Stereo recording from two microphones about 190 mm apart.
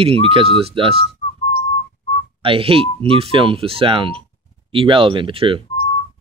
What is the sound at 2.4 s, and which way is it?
Speech, 30° right (ahead or behind).